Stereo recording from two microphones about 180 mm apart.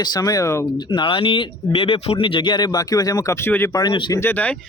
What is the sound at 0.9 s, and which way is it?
Speech, 30° left (ahead or behind).